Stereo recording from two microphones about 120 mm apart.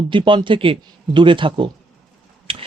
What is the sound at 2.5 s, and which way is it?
Gears, 50° right (ahead or behind).